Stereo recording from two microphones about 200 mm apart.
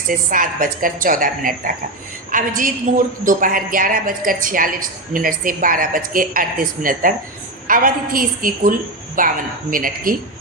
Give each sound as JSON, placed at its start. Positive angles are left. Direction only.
{"t": 0.1, "sound": "a woman's voice", "side_deg": -40}